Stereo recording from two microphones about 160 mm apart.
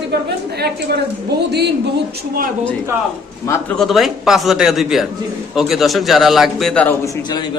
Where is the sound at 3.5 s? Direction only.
10° left (ahead or behind).